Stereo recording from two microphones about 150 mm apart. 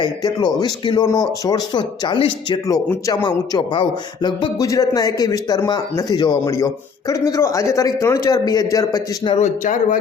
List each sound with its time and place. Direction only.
0.0 s speech: 25° left (ahead or behind)
2.6 s speech: 25° left (ahead or behind)
9.4 s a man's voice: 55° left (ahead or behind)